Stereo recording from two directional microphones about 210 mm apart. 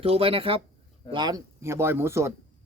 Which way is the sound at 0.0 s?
25° right (ahead or behind).